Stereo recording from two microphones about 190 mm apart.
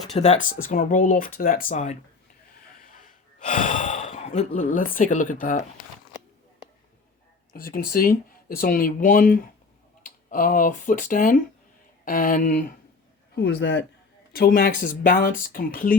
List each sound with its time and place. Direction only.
0.1 s speech: 35° left (ahead or behind)
0.6 s speech: 45° left (ahead or behind)
3.4 s speech: 40° left (ahead or behind)
7.5 s speech: 50° left (ahead or behind)
13.3 s a man's voice: 60° left (ahead or behind)
14.3 s speech: 50° left (ahead or behind)